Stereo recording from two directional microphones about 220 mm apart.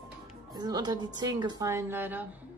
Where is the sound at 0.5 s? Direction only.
15° right (ahead or behind).